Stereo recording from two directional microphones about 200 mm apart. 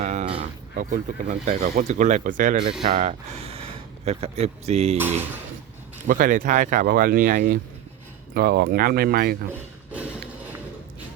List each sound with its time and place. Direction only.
0.0 s speech: 35° right (ahead or behind)
6.1 s speech: 40° right (ahead or behind)
9.5 s a sound: 5° right (ahead or behind)